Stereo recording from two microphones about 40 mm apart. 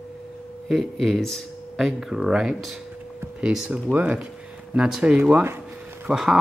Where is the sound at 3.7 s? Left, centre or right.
Right.